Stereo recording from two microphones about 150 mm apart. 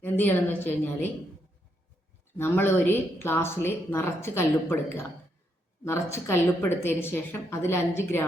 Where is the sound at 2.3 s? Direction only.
15° left (ahead or behind).